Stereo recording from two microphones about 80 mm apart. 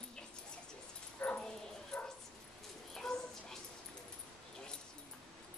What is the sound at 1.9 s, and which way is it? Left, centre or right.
Bow-wow, centre.